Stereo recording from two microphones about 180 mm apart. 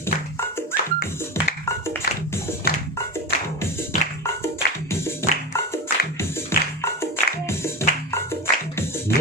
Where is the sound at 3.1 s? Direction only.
15° left (ahead or behind).